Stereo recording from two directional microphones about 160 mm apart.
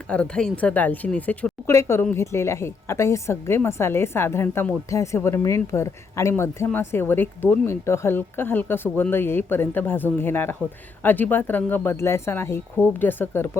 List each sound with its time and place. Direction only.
0.1 s speech: 5° left (ahead or behind)